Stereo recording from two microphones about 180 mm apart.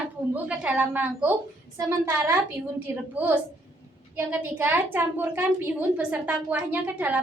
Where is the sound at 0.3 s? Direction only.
5° right (ahead or behind).